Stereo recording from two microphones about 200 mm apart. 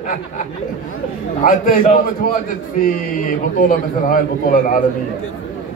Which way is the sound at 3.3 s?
40° left (ahead or behind).